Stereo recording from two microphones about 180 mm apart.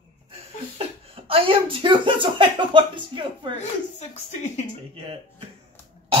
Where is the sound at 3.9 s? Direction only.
40° left (ahead or behind).